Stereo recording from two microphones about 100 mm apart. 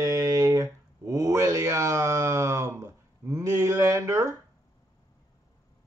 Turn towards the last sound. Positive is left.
turn(degrees=-30)  # may be behind; listen again after turning